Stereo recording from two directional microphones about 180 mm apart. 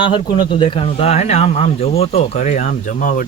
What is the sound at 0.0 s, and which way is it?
Speech, 25° left (ahead or behind).